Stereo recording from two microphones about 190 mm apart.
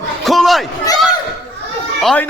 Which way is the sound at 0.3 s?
Centre (ahead or behind).